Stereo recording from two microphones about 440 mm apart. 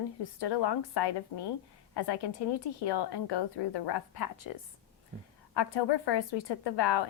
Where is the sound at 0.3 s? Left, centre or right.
Left.